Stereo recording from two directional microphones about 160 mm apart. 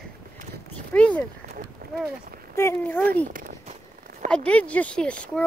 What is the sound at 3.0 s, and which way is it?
Speech, 65° right (ahead or behind).